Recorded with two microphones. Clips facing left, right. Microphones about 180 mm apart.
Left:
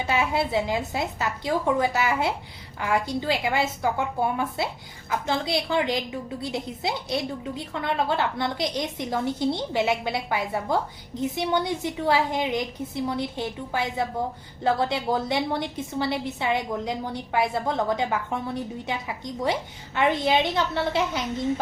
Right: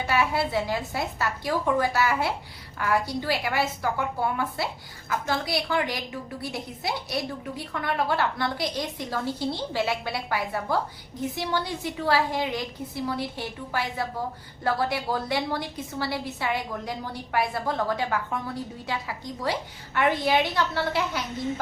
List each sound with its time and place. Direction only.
0.0 s a woman's voice: 20° left (ahead or behind)